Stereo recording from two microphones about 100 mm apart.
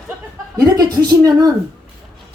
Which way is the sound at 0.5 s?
40° right (ahead or behind).